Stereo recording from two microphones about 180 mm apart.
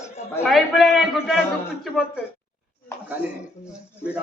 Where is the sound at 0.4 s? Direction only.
Centre (ahead or behind).